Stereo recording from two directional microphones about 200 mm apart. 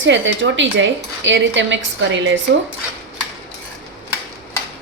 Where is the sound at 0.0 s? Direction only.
70° right (ahead or behind).